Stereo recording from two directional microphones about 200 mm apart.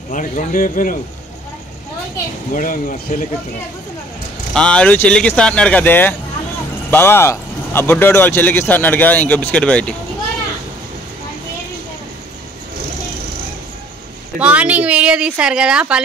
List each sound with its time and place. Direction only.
0.1 s speech: 40° left (ahead or behind)
2.5 s speech: 40° left (ahead or behind)
4.6 s speech: 5° left (ahead or behind)
14.4 s speech: 5° right (ahead or behind)